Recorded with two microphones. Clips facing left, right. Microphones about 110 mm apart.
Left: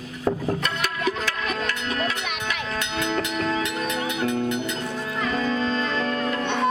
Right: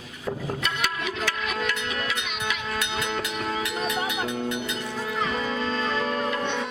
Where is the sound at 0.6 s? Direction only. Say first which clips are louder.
Left 3 dB; 45° left (ahead or behind).